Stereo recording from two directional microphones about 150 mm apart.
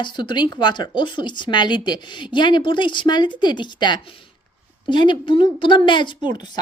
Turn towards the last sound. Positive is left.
turn(degrees=30)  # may be behind; listen again after turning